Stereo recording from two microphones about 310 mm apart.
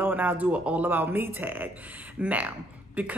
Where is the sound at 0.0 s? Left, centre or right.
Centre.